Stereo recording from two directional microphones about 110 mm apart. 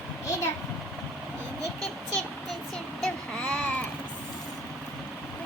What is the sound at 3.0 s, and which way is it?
Speech, 10° left (ahead or behind).